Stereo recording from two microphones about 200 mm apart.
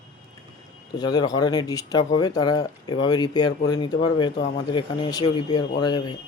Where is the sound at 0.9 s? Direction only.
20° left (ahead or behind).